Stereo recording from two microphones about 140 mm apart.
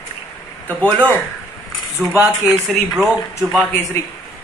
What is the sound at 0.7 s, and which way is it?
A man's voice, 10° left (ahead or behind).